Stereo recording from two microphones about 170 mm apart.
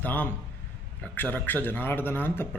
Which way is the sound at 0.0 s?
10° left (ahead or behind).